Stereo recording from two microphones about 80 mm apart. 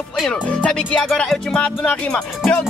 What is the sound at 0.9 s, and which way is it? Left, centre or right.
Music, centre.